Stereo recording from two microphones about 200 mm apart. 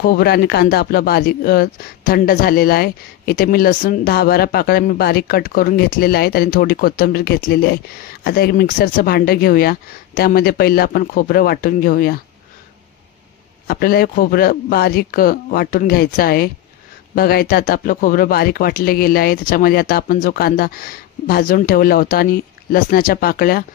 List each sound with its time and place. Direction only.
0.0 s speech: 50° left (ahead or behind)
13.7 s speech: 50° left (ahead or behind)